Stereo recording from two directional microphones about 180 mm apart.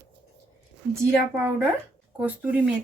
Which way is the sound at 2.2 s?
10° right (ahead or behind).